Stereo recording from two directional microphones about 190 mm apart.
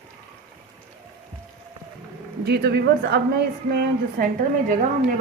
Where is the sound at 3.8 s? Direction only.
45° right (ahead or behind).